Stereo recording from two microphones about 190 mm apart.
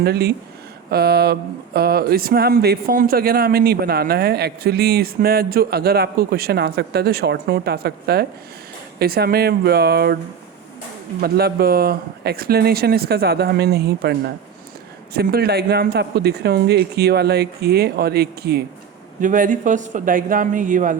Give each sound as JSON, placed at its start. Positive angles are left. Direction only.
{"t": 0.0, "sound": "speech", "side_deg": -60}
{"t": 11.2, "sound": "speech", "side_deg": -55}
{"t": 19.2, "sound": "a man's voice", "side_deg": -45}